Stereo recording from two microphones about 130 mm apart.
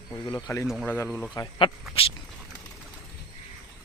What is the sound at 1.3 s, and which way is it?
Speech, 30° left (ahead or behind).